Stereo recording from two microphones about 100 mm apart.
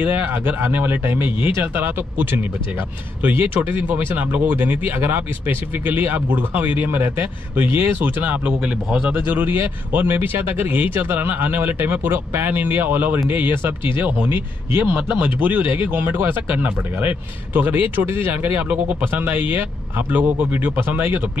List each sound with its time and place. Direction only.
0.0 s speech: 20° right (ahead or behind)